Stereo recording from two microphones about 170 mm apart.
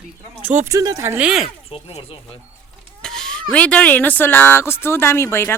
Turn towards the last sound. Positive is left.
turn(degrees=15)  # may be behind; listen again after turning